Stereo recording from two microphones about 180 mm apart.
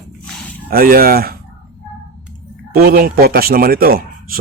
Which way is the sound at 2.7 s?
55° right (ahead or behind).